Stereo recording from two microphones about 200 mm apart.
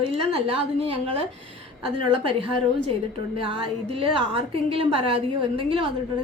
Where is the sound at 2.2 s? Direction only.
25° right (ahead or behind).